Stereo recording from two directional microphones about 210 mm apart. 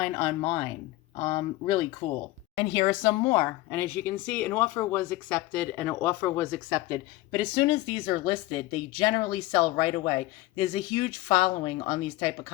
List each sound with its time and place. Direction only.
0.0 s speech: 25° left (ahead or behind)
3.4 s speech: 10° left (ahead or behind); by 12.3 s 25° left (ahead or behind)